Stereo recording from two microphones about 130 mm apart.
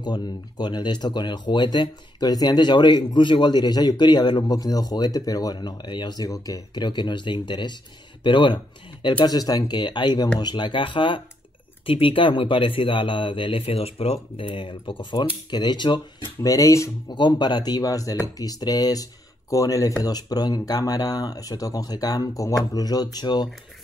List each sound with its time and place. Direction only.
0.0 s speech: 35° left (ahead or behind)
16.4 s speech: 25° left (ahead or behind)
17.1 s speech: 35° left (ahead or behind)